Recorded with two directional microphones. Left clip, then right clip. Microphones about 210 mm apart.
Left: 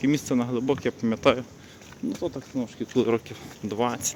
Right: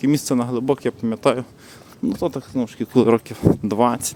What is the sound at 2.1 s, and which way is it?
Speech, 55° right (ahead or behind).